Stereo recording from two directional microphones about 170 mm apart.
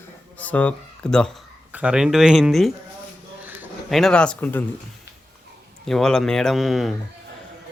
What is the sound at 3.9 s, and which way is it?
Speech, 5° left (ahead or behind).